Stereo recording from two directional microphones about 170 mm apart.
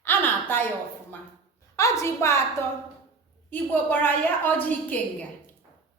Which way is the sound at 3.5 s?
10° left (ahead or behind).